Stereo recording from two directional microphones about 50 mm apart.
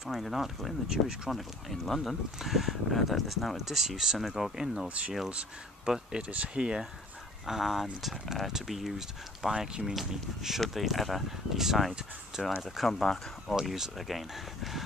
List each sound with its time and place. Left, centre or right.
0.2 s speech: centre
0.8 s speech: centre
1.3 s speech: centre
4.8 s speech: right
5.9 s speech: centre
7.4 s speech: centre
9.5 s speech: centre
13.6 s speech: centre